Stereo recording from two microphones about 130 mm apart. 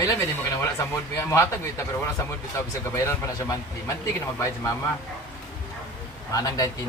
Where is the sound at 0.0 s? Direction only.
20° left (ahead or behind).